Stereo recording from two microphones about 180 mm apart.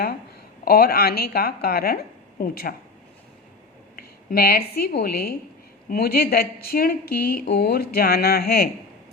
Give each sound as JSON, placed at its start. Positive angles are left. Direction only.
{"t": 0.6, "sound": "a woman's voice", "side_deg": 60}
{"t": 3.9, "sound": "a woman's voice", "side_deg": 55}